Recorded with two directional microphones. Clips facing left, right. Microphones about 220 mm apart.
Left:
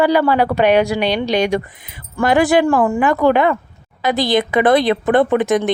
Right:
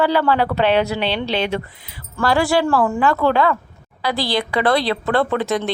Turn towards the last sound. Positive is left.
turn(degrees=20)  # may be behind; listen again after turning